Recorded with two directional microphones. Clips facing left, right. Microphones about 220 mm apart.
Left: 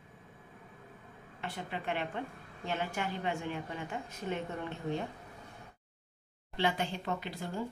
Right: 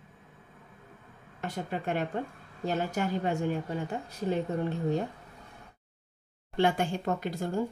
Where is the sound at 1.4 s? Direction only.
45° right (ahead or behind).